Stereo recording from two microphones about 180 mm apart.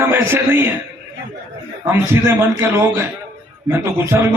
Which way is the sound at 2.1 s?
15° right (ahead or behind).